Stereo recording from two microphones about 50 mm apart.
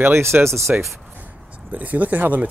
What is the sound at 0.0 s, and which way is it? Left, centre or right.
Speech, right.